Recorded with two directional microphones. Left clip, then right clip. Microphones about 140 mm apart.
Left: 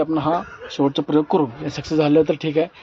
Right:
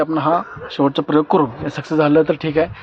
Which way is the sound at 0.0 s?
15° left (ahead or behind).